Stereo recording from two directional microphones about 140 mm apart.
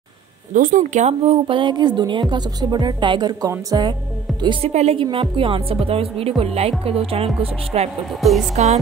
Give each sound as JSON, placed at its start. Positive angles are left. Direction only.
{"t": 0.5, "sound": "a woman's voice", "side_deg": -75}
{"t": 4.6, "sound": "speech", "side_deg": -50}
{"t": 8.2, "sound": "speech", "side_deg": 0}